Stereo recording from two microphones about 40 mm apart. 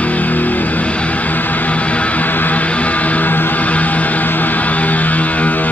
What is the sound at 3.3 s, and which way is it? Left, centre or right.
Music, left.